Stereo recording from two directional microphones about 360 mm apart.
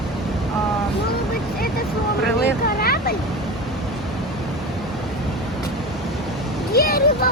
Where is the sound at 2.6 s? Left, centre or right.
Left.